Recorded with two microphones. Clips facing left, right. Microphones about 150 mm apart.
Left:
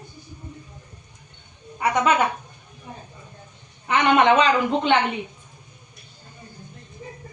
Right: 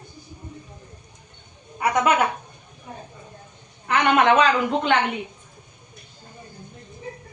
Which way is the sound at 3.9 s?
Centre (ahead or behind).